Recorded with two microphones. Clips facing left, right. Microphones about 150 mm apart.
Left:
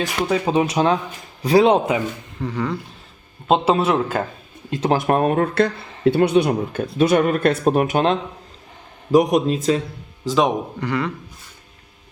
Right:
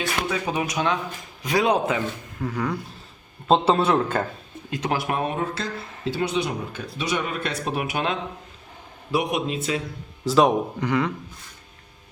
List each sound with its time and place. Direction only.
0.0 s a man's voice: 35° left (ahead or behind)
2.4 s speech: 10° right (ahead or behind)
3.5 s speech: 5° left (ahead or behind)
4.9 s speech: 45° left (ahead or behind); by 5.7 s 65° left (ahead or behind)
5.8 s a sound: centre (ahead or behind)
6.1 s speech: 60° left (ahead or behind); by 9.8 s 35° left (ahead or behind)
10.2 s speech: 5° right (ahead or behind)
10.8 s a man's voice: 20° right (ahead or behind)